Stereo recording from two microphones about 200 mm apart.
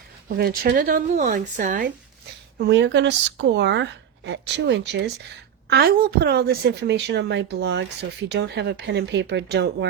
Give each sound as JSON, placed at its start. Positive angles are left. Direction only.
{"t": 0.3, "sound": "speech", "side_deg": -50}
{"t": 2.6, "sound": "a woman's voice", "side_deg": -60}